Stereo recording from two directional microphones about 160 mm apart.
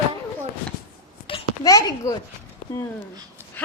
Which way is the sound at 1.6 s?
20° left (ahead or behind).